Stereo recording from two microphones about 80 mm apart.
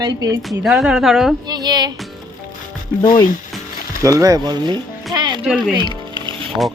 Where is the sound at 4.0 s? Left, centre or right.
Right.